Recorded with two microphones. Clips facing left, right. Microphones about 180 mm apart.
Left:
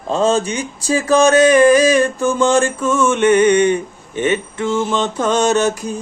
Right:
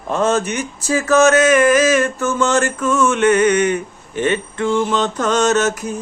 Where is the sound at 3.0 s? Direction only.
25° left (ahead or behind).